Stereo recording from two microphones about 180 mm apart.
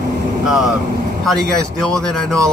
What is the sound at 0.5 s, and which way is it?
Speech, centre (ahead or behind).